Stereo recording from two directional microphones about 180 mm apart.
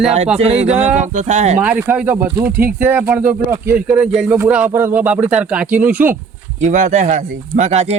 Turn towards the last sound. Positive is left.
turn(degrees=-35)  # may be behind; listen again after turning